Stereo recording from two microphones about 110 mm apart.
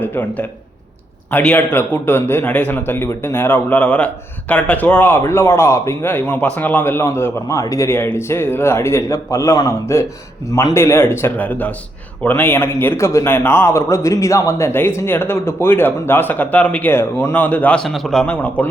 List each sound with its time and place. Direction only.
0.0 s a man's voice: 20° left (ahead or behind)
17.8 s speech: centre (ahead or behind)